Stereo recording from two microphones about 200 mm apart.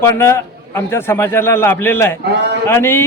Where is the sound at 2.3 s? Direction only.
55° right (ahead or behind).